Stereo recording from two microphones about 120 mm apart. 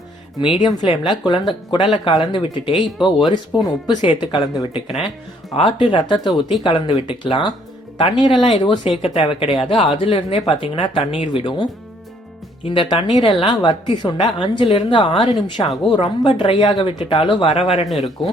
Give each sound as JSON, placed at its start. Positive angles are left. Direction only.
{"t": 0.6, "sound": "a woman's voice", "side_deg": 45}
{"t": 18.2, "sound": "speech", "side_deg": 5}